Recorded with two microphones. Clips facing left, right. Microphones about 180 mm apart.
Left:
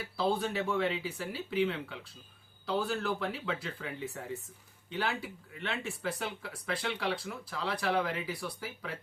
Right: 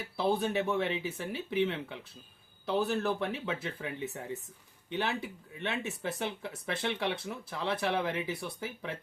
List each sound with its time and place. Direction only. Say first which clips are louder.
0.2 s speech: right 2 dB; 20° right (ahead or behind)